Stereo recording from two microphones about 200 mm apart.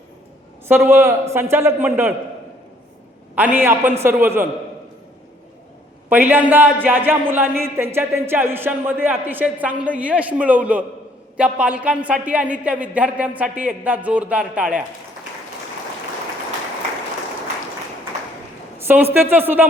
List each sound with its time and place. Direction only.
0.7 s speech: 10° right (ahead or behind)
3.3 s speech: 10° right (ahead or behind)
6.1 s speech: 10° right (ahead or behind)
18.8 s speech: 10° right (ahead or behind)